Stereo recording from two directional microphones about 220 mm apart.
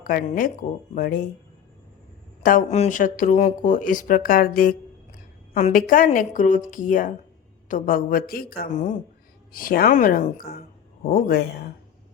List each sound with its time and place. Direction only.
0.0 s speech: 40° left (ahead or behind)
2.4 s speech: 40° left (ahead or behind)